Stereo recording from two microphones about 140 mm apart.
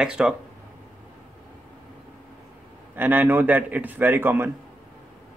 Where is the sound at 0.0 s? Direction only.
5° right (ahead or behind).